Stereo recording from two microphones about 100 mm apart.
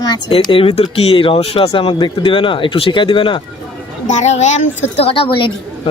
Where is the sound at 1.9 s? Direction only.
55° left (ahead or behind).